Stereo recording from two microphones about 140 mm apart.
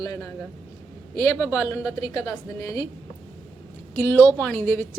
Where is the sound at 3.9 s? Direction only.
20° left (ahead or behind).